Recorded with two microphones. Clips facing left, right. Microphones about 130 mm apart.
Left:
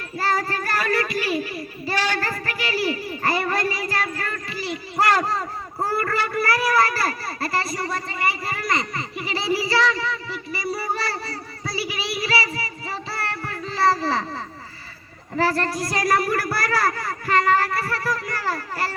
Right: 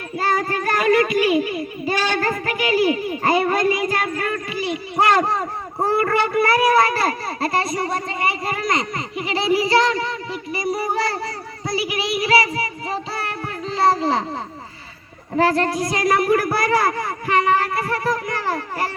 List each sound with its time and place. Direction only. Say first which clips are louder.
0.2 s child singing: right 3 dB; 20° right (ahead or behind)
4.2 s speech: right 6 dB; 15° right (ahead or behind)
15.4 s speech: right 4 dB; 15° right (ahead or behind)